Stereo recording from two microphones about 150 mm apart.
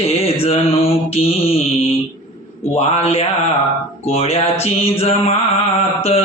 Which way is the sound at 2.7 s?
45° left (ahead or behind).